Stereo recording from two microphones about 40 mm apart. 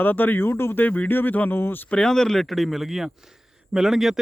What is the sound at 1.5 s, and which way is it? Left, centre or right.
Speech, left.